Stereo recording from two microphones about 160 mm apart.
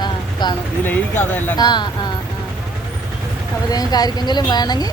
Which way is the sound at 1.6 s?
25° left (ahead or behind).